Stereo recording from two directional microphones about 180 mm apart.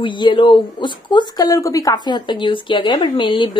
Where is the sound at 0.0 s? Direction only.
25° left (ahead or behind).